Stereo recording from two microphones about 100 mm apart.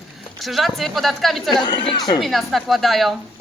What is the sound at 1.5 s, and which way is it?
Speech, 50° left (ahead or behind).